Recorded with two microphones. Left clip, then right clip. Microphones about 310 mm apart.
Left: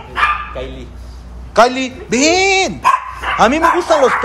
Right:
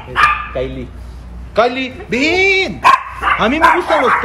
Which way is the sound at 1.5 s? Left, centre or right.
Centre.